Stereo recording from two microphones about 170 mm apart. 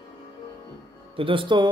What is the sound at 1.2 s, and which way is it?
Speech, 30° right (ahead or behind).